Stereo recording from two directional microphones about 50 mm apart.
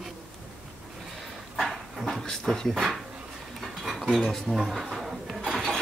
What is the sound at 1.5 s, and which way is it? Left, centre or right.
Dog, centre.